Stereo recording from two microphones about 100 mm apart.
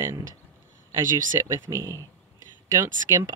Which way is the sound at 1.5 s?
35° right (ahead or behind).